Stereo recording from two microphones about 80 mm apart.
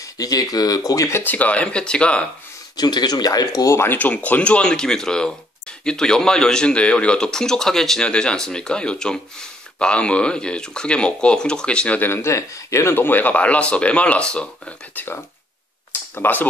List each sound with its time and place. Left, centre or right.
0.0 s speech: left
1.2 s speech: centre
2.7 s speech: left
3.7 s speech: left
4.1 s speech: centre
12.0 s speech: left; by 14.5 s centre
15.0 s speech: left
15.9 s a sound: left